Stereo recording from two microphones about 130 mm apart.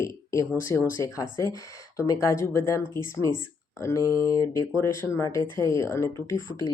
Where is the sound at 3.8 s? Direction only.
20° left (ahead or behind).